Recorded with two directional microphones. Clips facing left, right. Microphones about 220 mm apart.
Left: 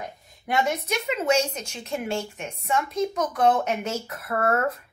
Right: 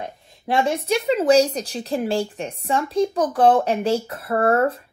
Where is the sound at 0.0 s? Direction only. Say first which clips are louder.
Right 4 dB; 30° right (ahead or behind).